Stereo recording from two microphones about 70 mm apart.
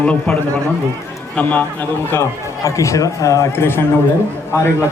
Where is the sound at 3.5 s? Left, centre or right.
Left.